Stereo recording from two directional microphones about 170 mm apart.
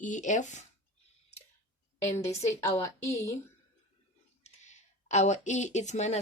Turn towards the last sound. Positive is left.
turn(degrees=45)  # may be behind; listen again after turning